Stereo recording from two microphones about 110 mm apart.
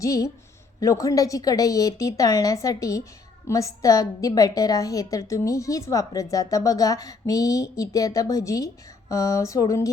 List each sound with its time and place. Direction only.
0.0 s a woman's voice: 30° left (ahead or behind)